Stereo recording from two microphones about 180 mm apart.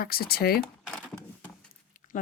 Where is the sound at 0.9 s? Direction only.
Centre (ahead or behind).